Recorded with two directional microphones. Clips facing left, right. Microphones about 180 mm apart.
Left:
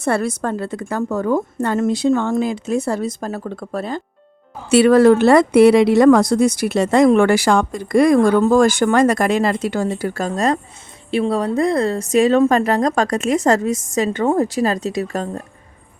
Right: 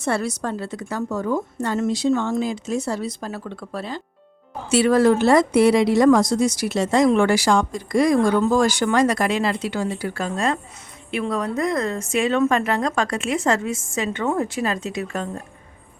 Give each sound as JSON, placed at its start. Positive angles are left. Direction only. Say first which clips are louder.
{"t": 0.0, "sound": "a woman's voice", "louder": "left 4 dB", "side_deg": 55}
{"t": 4.7, "sound": "a woman's voice", "louder": "left 6 dB", "side_deg": 65}